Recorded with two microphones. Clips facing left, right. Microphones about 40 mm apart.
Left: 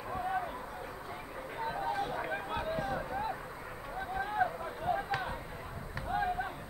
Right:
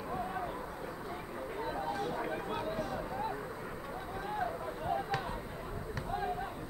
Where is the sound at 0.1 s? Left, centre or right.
Centre.